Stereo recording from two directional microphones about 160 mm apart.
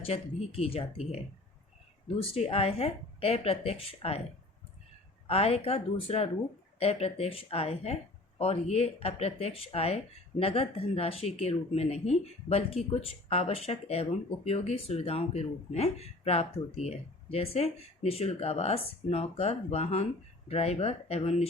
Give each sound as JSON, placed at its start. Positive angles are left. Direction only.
{"t": 0.0, "sound": "speech", "side_deg": 40}
{"t": 5.3, "sound": "speech", "side_deg": 40}